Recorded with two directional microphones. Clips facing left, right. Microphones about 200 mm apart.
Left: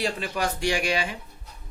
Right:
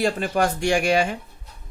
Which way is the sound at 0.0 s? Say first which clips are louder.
Right 6 dB; 50° right (ahead or behind).